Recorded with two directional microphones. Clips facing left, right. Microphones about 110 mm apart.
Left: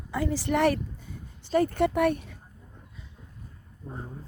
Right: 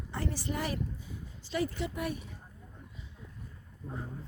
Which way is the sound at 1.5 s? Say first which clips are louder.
Left 10 dB; 50° left (ahead or behind).